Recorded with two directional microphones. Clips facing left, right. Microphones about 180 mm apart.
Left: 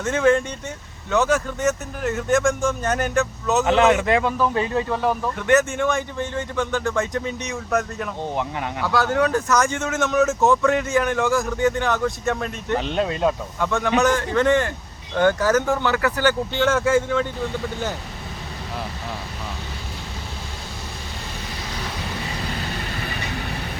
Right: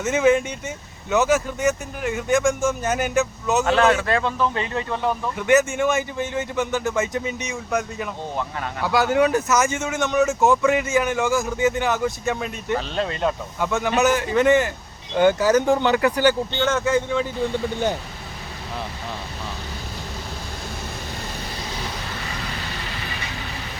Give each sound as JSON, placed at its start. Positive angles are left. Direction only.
{"t": 0.0, "sound": "speech", "side_deg": -5}
{"t": 3.7, "sound": "speech", "side_deg": 20}
{"t": 5.4, "sound": "speech", "side_deg": 0}
{"t": 8.8, "sound": "speech", "side_deg": -10}
{"t": 12.8, "sound": "speech", "side_deg": 15}
{"t": 13.6, "sound": "speech", "side_deg": -5}
{"t": 16.5, "sound": "speech", "side_deg": 5}